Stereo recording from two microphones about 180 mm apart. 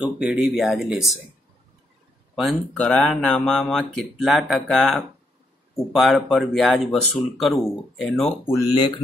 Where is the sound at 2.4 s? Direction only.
Centre (ahead or behind).